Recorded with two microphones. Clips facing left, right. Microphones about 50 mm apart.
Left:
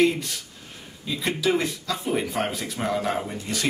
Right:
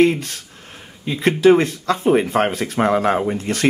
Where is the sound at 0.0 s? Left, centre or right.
Right.